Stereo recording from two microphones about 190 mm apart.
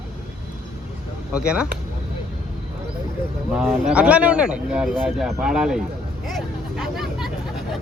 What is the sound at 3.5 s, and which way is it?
Speech, 5° right (ahead or behind).